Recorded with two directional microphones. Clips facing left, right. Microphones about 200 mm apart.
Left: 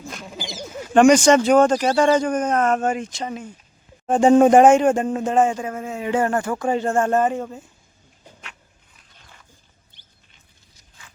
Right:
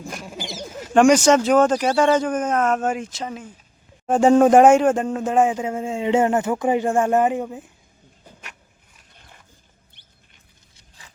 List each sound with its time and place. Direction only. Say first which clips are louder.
0.1 s a sound: even; 5° right (ahead or behind)
1.8 s speech: left 1 dB; 5° right (ahead or behind)
5.3 s speech: even; 10° right (ahead or behind)
5.5 s speech: right 3 dB; 20° right (ahead or behind)